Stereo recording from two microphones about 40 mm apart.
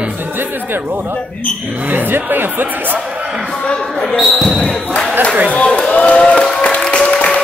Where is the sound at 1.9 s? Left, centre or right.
Right.